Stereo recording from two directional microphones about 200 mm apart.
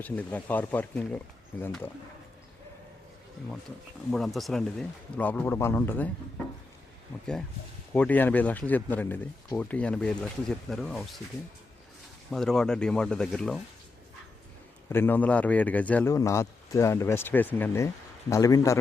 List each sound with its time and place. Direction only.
0.0 s a man's voice: 5° left (ahead or behind)
4.4 s a man's voice: centre (ahead or behind)
7.1 s a man's voice: 10° left (ahead or behind)
12.3 s speech: centre (ahead or behind)
14.8 s a man's voice: 10° left (ahead or behind)